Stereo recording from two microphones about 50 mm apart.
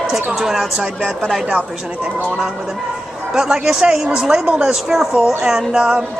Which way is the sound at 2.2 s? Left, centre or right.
Right.